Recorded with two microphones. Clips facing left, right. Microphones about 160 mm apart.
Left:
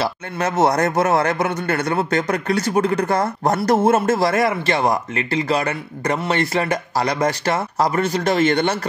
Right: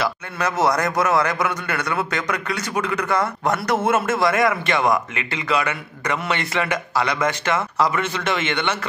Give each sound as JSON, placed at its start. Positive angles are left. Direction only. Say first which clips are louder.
{"t": 0.0, "sound": "a man's voice", "louder": "left 2 dB", "side_deg": 25}